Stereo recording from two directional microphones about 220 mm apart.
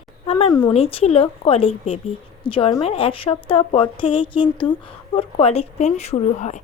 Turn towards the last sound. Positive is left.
turn(degrees=30)  # may be behind; listen again after turning